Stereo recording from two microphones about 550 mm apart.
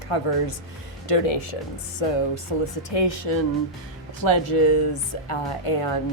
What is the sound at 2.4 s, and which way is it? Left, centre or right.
Speech, left.